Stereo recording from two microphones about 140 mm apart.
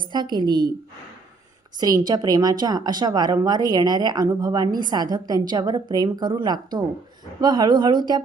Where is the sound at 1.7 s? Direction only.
30° right (ahead or behind).